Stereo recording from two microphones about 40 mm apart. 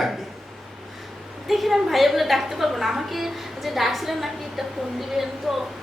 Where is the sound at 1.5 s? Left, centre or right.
Centre.